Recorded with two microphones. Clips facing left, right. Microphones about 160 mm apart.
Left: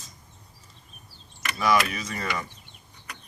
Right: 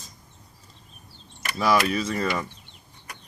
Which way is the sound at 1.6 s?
35° right (ahead or behind).